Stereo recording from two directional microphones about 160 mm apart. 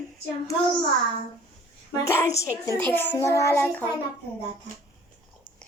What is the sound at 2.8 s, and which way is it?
Child singing, 10° left (ahead or behind).